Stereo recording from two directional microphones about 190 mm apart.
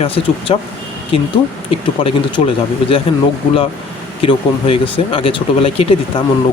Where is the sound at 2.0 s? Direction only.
30° left (ahead or behind).